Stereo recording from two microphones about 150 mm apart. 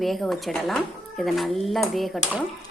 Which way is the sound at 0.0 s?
Centre (ahead or behind).